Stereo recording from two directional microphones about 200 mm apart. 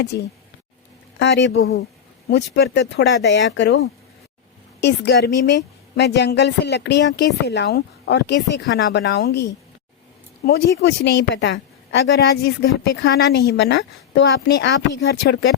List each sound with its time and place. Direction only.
0.1 s a woman's voice: 55° left (ahead or behind)
4.8 s a woman's voice: 60° left (ahead or behind)